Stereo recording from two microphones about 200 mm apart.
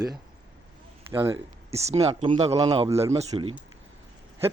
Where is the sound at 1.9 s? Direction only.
30° right (ahead or behind).